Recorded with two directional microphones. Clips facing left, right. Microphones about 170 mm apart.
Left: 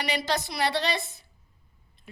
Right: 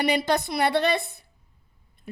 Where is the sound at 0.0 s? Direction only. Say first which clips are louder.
Right 6 dB; 55° right (ahead or behind).